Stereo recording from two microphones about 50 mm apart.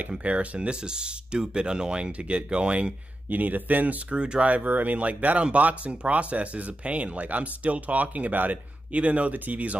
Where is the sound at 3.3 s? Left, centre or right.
Right.